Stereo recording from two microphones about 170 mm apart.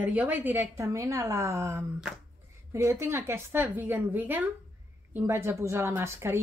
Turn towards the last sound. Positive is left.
turn(degrees=-15)  # may be behind; listen again after turning